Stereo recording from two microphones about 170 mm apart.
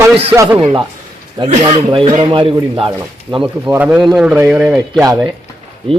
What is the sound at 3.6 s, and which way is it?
A man's voice, 10° right (ahead or behind).